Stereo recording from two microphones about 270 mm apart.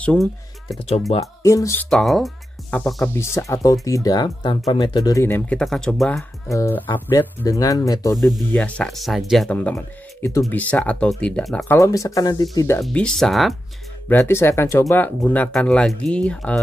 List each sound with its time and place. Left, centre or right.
0.0 s a sound: centre
1.1 s speech: centre
8.2 s speech: centre